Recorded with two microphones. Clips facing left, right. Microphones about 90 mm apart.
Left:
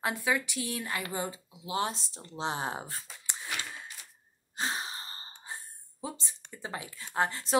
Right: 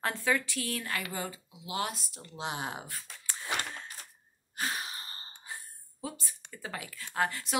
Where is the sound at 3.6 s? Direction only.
50° right (ahead or behind).